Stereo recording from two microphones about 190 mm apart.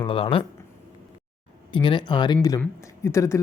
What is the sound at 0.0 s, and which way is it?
Speech, 30° left (ahead or behind).